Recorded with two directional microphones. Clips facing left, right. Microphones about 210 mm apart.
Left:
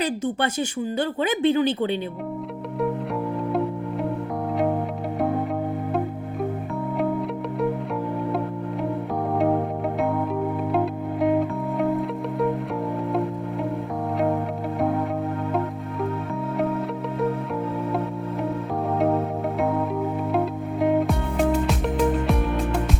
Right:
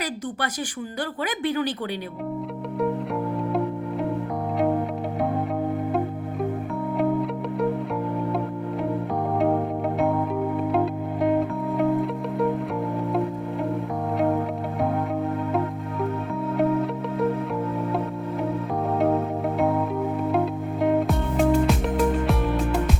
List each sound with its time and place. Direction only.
0.0 s speech: 25° left (ahead or behind)
7.0 s music: centre (ahead or behind)
10.7 s music: centre (ahead or behind)
20.3 s music: centre (ahead or behind)